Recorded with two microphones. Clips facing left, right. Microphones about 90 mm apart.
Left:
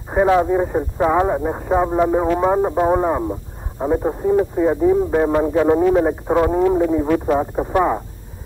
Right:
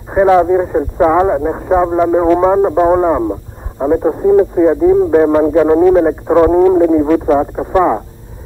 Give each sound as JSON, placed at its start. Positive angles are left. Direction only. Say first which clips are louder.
{"t": 0.1, "sound": "a man's voice", "louder": "right 6 dB", "side_deg": -30}
{"t": 0.9, "sound": "a man's voice", "louder": "right 6 dB", "side_deg": -35}
{"t": 2.2, "sound": "a man's voice", "louder": "right 7 dB", "side_deg": -40}
{"t": 6.4, "sound": "speech", "louder": "right 8 dB", "side_deg": -40}